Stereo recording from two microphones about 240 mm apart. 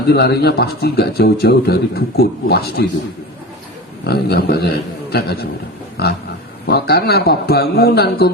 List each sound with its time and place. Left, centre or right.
0.1 s a man's voice: left
4.0 s a man's voice: left
6.7 s a man's voice: left